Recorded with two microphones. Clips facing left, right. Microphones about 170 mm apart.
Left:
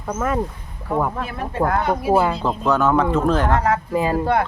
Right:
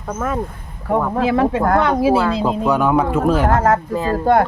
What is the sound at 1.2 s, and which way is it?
Speech, 90° right.